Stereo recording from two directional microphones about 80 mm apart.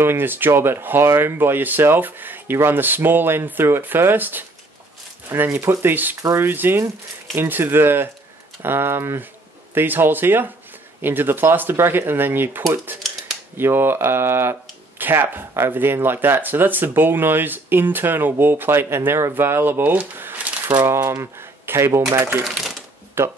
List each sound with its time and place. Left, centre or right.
0.0 s speech: right
22.4 s typewriter: centre
23.2 s speech: right